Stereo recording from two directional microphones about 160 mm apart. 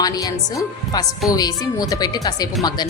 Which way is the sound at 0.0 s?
25° left (ahead or behind).